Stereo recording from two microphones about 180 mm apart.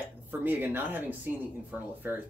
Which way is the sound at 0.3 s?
10° right (ahead or behind).